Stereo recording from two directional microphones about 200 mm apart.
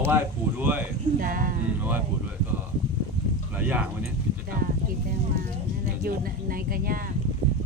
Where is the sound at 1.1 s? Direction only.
45° right (ahead or behind).